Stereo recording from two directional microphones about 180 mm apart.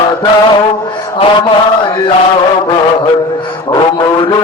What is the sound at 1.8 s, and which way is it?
Chant, 25° left (ahead or behind).